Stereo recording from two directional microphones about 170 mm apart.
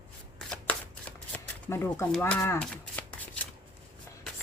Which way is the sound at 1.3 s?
15° left (ahead or behind).